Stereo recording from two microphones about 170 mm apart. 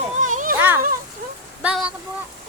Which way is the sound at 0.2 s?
50° right (ahead or behind).